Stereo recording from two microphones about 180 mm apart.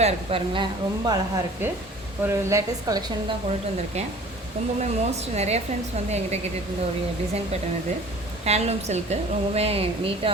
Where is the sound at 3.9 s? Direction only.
35° right (ahead or behind).